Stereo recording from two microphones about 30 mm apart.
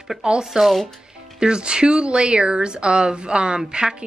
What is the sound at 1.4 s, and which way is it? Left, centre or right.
Speech, right.